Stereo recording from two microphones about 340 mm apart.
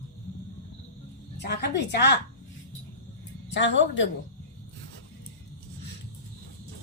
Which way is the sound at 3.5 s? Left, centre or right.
Left.